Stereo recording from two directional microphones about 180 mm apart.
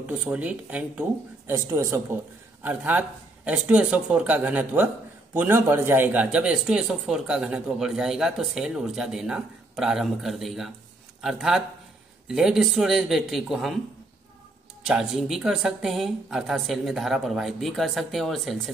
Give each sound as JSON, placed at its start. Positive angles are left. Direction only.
{"t": 0.0, "sound": "a man's voice", "side_deg": -5}
{"t": 14.9, "sound": "speech", "side_deg": -5}